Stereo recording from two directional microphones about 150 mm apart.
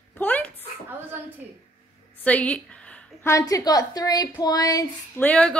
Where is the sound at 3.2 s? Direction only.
20° left (ahead or behind).